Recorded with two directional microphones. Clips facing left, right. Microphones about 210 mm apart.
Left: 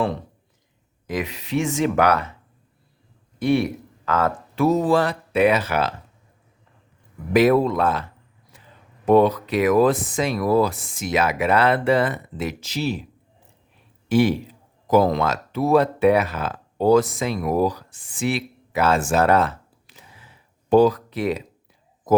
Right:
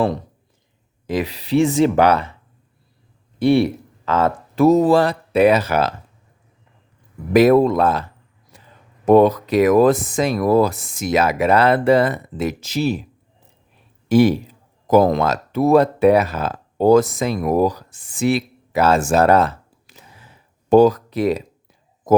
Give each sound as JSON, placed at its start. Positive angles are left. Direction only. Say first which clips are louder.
{"t": 1.0, "sound": "speech", "louder": "right 5 dB", "side_deg": -30}
{"t": 3.3, "sound": "speech", "louder": "right 5 dB", "side_deg": -30}
{"t": 4.5, "sound": "speech", "louder": "right 5 dB", "side_deg": -40}
{"t": 7.3, "sound": "speech", "louder": "right 4 dB", "side_deg": -45}
{"t": 8.5, "sound": "a sound", "louder": "right 3 dB", "side_deg": -40}
{"t": 9.0, "sound": "speech", "louder": "right 4 dB", "side_deg": -45}
{"t": 14.1, "sound": "speech", "louder": "right 4 dB", "side_deg": -40}
{"t": 19.9, "sound": "a sound", "louder": "right 3 dB", "side_deg": -45}
{"t": 20.7, "sound": "speech", "louder": "right 3 dB", "side_deg": -45}